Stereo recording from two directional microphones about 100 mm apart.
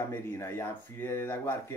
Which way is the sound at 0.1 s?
25° left (ahead or behind).